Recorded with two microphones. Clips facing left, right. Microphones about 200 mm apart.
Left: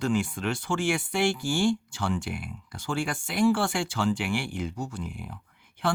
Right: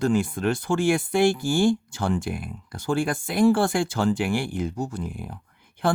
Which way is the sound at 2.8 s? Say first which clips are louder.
Right 6 dB; 55° right (ahead or behind).